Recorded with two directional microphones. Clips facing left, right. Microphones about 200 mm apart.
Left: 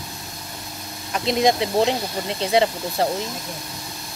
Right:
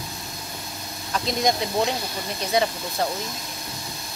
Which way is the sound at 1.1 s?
25° left (ahead or behind).